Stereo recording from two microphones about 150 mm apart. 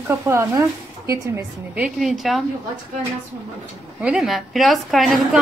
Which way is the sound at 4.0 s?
5° right (ahead or behind).